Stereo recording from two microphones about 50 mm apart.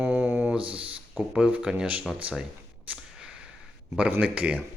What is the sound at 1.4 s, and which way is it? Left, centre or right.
Speech, right.